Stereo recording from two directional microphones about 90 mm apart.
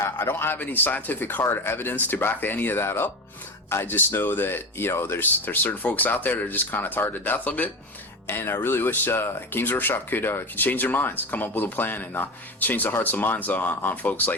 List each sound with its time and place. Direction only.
0.0 s speech: 25° left (ahead or behind)